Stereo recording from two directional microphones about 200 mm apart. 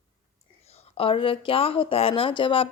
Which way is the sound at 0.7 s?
25° left (ahead or behind).